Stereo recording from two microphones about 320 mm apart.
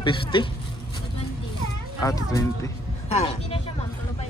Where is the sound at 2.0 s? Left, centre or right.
Centre.